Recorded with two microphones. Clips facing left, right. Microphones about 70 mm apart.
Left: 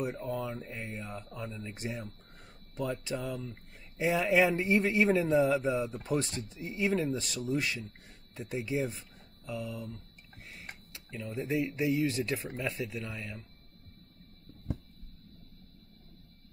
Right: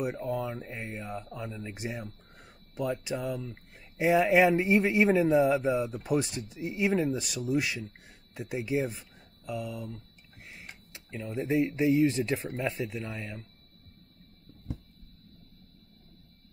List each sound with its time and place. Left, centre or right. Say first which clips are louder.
0.0 s speech: right 3 dB; centre
1.3 s speech: right 2 dB; centre
1.7 s speech: right 2 dB; centre
3.3 s speech: right 3 dB; centre
3.9 s speech: right 4 dB; right
10.9 s speech: right 3 dB; right